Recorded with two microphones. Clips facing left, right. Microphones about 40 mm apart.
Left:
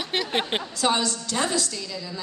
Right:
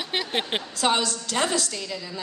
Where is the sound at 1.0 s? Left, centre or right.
Right.